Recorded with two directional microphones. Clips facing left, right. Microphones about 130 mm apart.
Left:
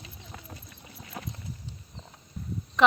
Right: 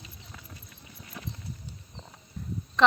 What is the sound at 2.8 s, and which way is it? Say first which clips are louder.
Speech: even; 10° left (ahead or behind).